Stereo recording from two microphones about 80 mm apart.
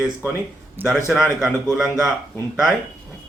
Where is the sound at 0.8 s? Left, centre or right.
Right.